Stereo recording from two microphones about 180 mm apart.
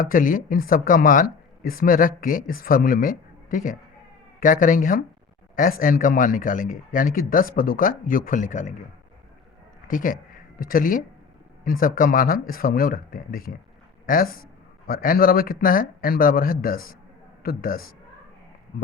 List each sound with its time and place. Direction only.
0.0 s speech: 50° left (ahead or behind)
9.8 s speech: 50° left (ahead or behind)
14.8 s a man's voice: 55° left (ahead or behind)